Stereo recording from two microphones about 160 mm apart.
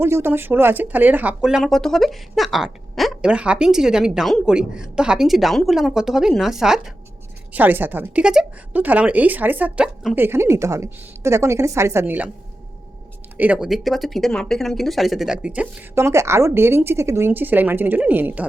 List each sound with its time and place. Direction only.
0.0 s a woman's voice: 15° right (ahead or behind)
10.2 s a woman's voice: 15° right (ahead or behind)
13.3 s speech: 10° right (ahead or behind)
16.0 s a woman's voice: 15° right (ahead or behind)